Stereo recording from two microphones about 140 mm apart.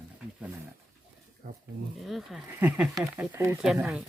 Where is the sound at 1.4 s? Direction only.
90° right.